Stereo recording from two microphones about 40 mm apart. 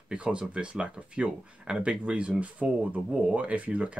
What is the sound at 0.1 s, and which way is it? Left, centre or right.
Speech, right.